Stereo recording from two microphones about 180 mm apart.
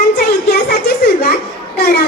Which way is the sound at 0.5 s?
60° left (ahead or behind).